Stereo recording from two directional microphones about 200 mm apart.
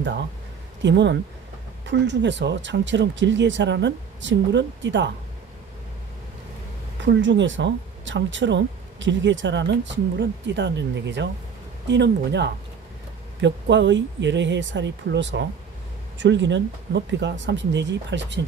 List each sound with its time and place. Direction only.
0.8 s speech: 60° right (ahead or behind)
7.1 s speech: 65° right (ahead or behind)